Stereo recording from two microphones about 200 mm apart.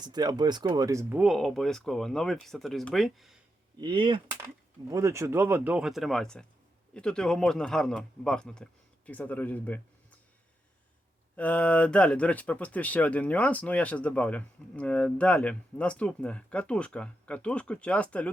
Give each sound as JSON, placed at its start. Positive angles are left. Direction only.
{"t": 0.0, "sound": "speech", "side_deg": -20}
{"t": 1.2, "sound": "speech", "side_deg": 0}
{"t": 3.8, "sound": "speech", "side_deg": -25}
{"t": 11.3, "sound": "speech", "side_deg": 5}